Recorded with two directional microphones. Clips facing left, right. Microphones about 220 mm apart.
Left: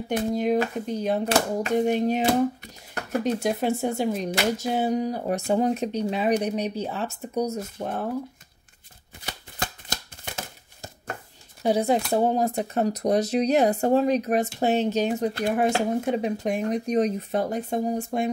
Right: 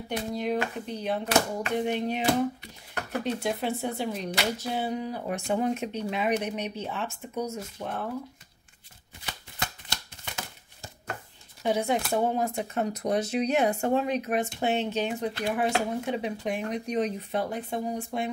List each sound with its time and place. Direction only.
0.1 s speech: 45° left (ahead or behind)
9.2 s a sound: 45° left (ahead or behind)
11.6 s speech: 35° left (ahead or behind)